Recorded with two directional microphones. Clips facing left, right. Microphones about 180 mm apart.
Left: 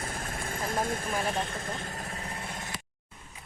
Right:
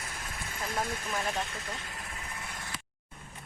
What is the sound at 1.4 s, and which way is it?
Vehicle, 50° left (ahead or behind).